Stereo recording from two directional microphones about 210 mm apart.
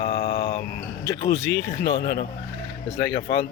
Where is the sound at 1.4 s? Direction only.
50° left (ahead or behind).